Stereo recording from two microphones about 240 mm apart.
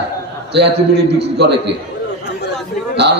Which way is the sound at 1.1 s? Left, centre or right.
Right.